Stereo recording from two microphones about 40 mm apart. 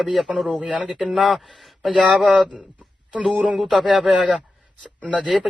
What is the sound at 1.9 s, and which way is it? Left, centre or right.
Speech, centre.